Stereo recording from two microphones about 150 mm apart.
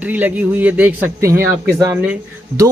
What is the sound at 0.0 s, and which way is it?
Speech, 10° right (ahead or behind).